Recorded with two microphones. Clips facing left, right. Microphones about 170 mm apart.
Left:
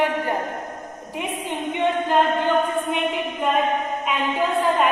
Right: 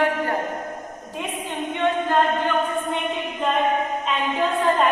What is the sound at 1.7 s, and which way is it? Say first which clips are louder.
Speech: left 1 dB; 15° left (ahead or behind).